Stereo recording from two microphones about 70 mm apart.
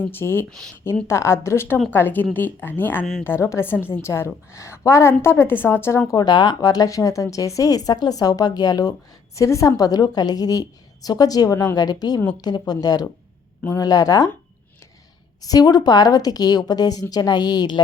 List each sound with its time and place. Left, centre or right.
0.1 s a woman's voice: left
6.1 s speech: left
9.3 s a woman's voice: left
15.4 s a woman's voice: left